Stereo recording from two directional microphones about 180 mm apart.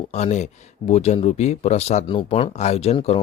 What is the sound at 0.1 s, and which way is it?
A man's voice, 40° left (ahead or behind).